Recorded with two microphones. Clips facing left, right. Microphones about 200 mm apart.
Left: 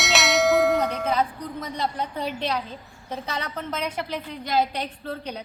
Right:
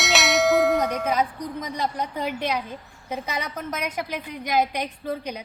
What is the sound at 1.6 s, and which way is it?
A woman's voice, 15° right (ahead or behind).